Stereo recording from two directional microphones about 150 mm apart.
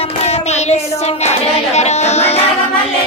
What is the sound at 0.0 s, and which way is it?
Child singing, 45° left (ahead or behind).